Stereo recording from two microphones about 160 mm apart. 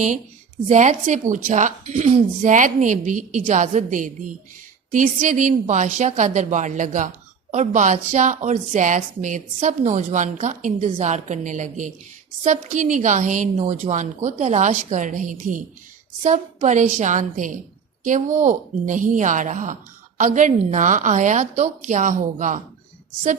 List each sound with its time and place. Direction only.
0.7 s speech: 50° right (ahead or behind)